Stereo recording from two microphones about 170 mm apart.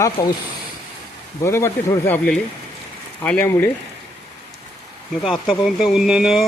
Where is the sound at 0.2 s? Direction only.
20° left (ahead or behind).